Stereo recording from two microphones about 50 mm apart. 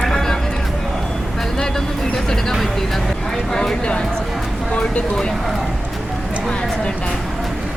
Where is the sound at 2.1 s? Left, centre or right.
Centre.